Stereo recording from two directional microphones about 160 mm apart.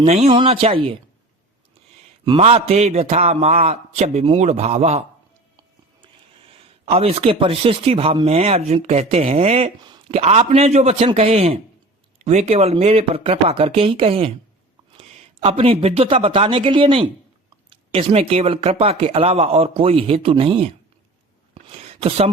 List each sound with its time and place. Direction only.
0.0 s speech: 40° right (ahead or behind)
2.4 s speech: 40° right (ahead or behind)
6.5 s speech: 35° right (ahead or behind)
9.8 s a sound: 30° right (ahead or behind)
10.2 s a man's voice: 40° right (ahead or behind)
21.5 s a sound: 40° right (ahead or behind)